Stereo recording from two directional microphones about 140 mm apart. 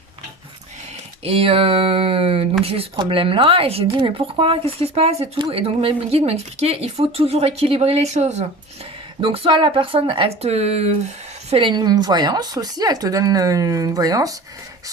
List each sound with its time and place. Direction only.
1.2 s speech: 45° right (ahead or behind)
9.2 s speech: 40° right (ahead or behind)
11.5 s speech: 35° right (ahead or behind)